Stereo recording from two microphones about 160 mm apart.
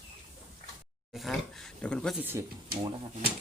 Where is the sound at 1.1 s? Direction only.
Centre (ahead or behind).